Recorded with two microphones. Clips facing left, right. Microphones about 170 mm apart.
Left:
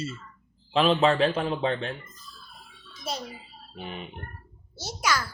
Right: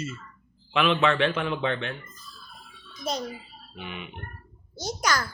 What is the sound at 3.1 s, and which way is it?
Speech, 5° left (ahead or behind).